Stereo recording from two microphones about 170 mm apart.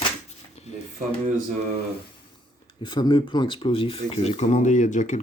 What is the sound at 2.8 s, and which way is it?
Speech, 25° left (ahead or behind).